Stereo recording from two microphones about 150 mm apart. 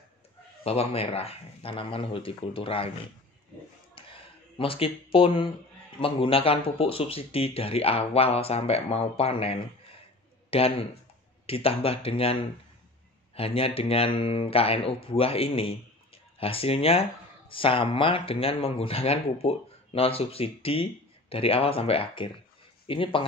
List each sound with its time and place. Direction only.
0.7 s speech: 40° left (ahead or behind)
3.9 s a sound: 35° left (ahead or behind)
5.9 s speech: 35° left (ahead or behind)